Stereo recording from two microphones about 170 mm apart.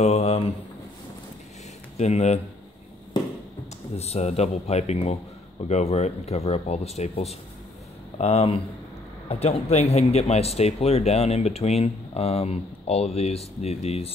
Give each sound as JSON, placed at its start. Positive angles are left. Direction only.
{"t": 0.0, "sound": "speech", "side_deg": 40}
{"t": 2.0, "sound": "speech", "side_deg": 40}
{"t": 3.9, "sound": "speech", "side_deg": 40}